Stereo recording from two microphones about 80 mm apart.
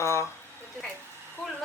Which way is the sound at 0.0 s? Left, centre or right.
Left.